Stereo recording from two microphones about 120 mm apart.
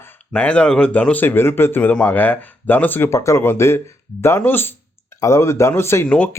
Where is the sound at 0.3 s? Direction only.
10° left (ahead or behind).